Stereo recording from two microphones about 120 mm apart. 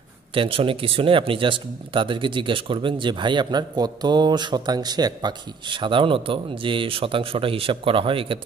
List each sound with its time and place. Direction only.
0.3 s speech: 45° right (ahead or behind)